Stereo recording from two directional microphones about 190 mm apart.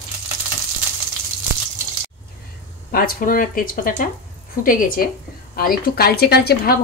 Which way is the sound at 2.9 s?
50° left (ahead or behind).